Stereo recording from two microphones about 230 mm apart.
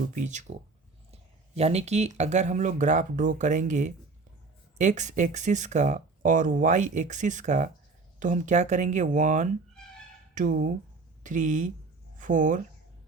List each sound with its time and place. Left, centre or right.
0.1 s speech: right